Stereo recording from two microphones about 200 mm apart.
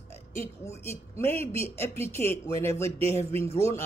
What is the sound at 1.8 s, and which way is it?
Speech, 10° left (ahead or behind).